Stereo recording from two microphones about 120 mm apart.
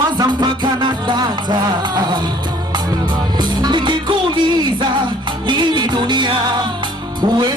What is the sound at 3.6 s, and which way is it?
Music, 40° right (ahead or behind).